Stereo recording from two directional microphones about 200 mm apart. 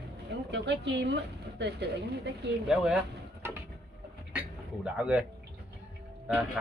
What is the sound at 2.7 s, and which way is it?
Speech, centre (ahead or behind).